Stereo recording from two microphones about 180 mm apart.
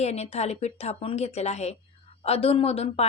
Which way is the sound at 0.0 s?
35° left (ahead or behind).